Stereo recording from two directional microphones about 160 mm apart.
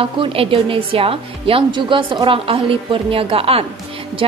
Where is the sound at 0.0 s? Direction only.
35° right (ahead or behind).